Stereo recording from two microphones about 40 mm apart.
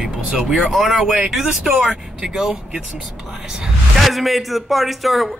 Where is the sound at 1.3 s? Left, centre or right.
Centre.